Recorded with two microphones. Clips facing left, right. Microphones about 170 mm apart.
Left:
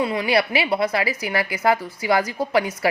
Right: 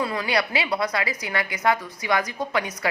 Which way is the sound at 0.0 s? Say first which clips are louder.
Left 4 dB; 25° left (ahead or behind).